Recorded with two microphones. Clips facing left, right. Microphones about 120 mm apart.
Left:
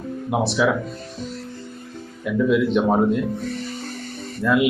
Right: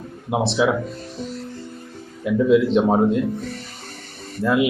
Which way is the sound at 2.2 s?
30° right (ahead or behind).